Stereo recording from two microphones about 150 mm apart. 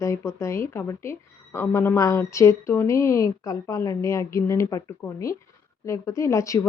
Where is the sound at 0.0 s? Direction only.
20° left (ahead or behind).